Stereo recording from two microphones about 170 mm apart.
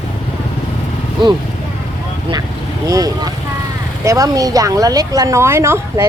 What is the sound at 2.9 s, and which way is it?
Speech, 20° right (ahead or behind).